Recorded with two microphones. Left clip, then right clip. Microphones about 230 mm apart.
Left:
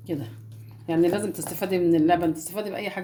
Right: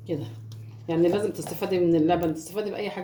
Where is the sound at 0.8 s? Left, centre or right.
Left.